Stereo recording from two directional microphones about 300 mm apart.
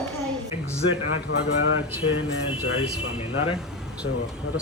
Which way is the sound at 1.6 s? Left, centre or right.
Left.